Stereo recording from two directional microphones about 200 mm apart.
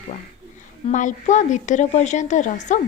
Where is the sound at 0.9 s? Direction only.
40° left (ahead or behind).